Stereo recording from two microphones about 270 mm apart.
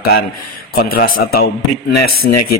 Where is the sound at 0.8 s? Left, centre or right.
Left.